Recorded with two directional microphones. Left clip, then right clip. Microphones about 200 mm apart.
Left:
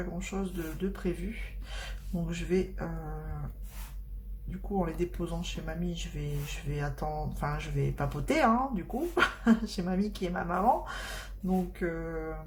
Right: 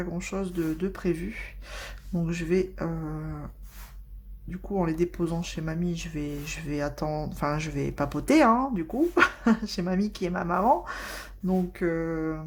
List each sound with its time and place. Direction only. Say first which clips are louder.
0.0 s speech: right 4 dB; 40° right (ahead or behind)
4.8 s speech: right 7 dB; 45° right (ahead or behind)